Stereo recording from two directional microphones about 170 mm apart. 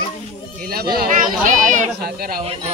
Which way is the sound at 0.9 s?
50° right (ahead or behind).